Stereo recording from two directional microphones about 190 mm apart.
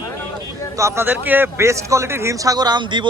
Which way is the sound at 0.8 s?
15° right (ahead or behind).